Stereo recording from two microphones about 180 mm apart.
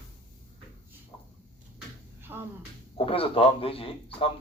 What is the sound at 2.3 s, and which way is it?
Speech, 10° right (ahead or behind).